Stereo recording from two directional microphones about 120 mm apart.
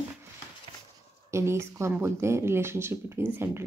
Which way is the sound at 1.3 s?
20° right (ahead or behind).